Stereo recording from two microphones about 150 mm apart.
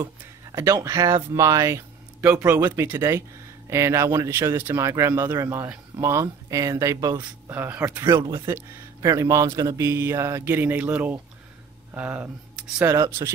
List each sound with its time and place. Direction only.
0.0 s speech: 20° right (ahead or behind)
8.0 s speech: 20° right (ahead or behind); by 12.8 s 5° right (ahead or behind)
12.8 s speech: 20° right (ahead or behind)